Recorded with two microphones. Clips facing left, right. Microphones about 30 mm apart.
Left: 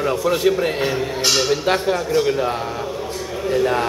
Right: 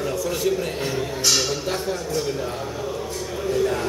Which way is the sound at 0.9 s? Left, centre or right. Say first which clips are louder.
Left 3 dB; centre.